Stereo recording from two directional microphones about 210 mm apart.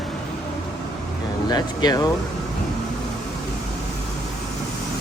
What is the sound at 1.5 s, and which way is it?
Speech, 20° left (ahead or behind).